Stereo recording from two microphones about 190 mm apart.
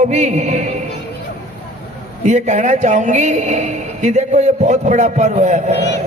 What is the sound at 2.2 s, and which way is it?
A man's voice, 40° right (ahead or behind).